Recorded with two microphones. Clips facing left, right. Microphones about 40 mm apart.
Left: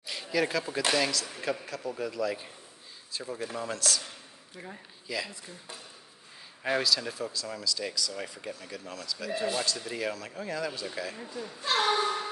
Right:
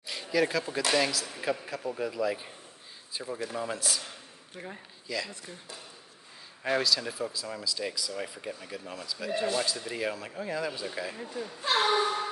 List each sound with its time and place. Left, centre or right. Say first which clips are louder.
0.0 s a man's voice: right 2 dB; centre
4.6 s speech: right 2 dB; right
5.0 s speech: even; centre
6.6 s a man's voice: even; centre
8.1 s a man's voice: right 1 dB; centre